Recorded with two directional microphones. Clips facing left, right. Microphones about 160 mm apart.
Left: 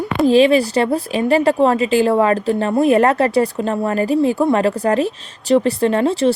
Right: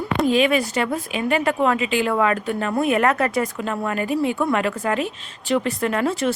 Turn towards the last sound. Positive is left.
turn(degrees=30)  # may be behind; listen again after turning